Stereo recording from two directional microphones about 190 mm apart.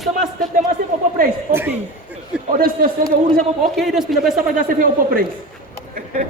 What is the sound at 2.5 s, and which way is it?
Speech, 50° right (ahead or behind).